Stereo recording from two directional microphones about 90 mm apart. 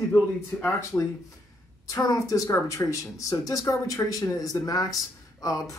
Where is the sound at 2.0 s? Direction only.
40° left (ahead or behind).